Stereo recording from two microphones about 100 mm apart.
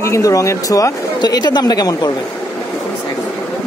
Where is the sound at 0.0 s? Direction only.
30° left (ahead or behind).